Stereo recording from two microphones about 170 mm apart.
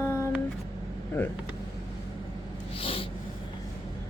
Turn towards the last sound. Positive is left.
turn(degrees=35)  # may be behind; listen again after turning